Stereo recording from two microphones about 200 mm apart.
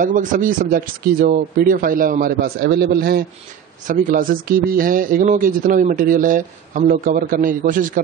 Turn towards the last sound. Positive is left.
turn(degrees=-45)  # may be behind; listen again after turning